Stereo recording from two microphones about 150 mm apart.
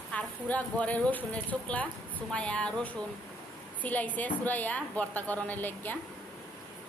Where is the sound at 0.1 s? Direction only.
10° left (ahead or behind).